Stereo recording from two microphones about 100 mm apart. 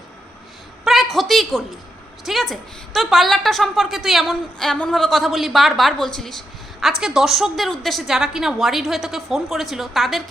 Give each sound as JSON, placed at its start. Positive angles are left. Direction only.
{"t": 1.1, "sound": "a woman's voice", "side_deg": 0}